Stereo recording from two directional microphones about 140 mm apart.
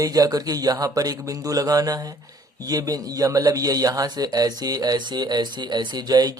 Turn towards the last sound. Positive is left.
turn(degrees=-30)  # may be behind; listen again after turning